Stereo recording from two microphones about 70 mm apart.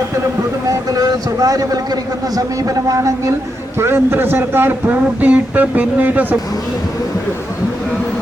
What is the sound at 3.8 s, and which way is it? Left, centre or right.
Speech, right.